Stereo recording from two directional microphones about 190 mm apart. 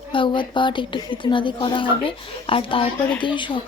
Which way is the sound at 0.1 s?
25° left (ahead or behind).